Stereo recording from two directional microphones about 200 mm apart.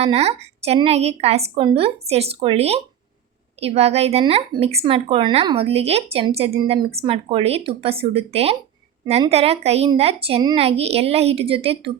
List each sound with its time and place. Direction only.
0.0 s a woman's voice: 30° right (ahead or behind)